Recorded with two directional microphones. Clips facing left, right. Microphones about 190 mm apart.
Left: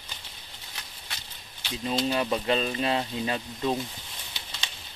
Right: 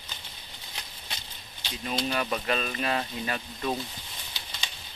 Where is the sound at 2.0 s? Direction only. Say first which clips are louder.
Left 3 dB; 25° left (ahead or behind).